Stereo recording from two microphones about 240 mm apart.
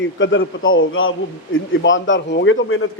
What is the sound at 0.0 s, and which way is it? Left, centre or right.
A man's voice, left.